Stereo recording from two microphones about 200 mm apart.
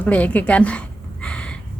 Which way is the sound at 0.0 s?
5° left (ahead or behind).